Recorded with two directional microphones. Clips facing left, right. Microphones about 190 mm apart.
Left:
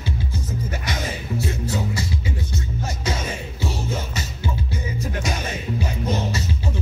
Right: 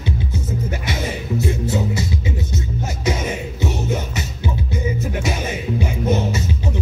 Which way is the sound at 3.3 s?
20° right (ahead or behind).